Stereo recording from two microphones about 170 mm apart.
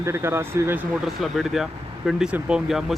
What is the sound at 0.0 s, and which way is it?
Speech, 15° right (ahead or behind).